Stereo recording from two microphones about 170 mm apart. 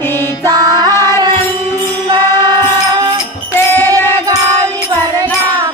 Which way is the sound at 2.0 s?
25° right (ahead or behind).